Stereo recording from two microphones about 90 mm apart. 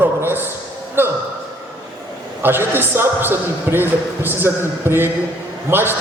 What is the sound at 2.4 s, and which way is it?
A man's voice, 25° right (ahead or behind).